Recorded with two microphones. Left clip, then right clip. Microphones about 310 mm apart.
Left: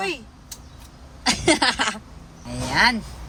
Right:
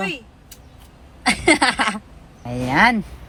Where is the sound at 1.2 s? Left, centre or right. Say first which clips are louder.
Right 3 dB; centre.